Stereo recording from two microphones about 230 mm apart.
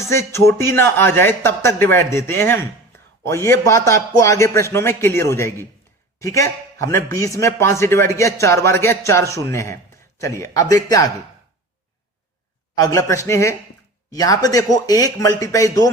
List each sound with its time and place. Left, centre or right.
0.0 s speech: centre
12.7 s speech: centre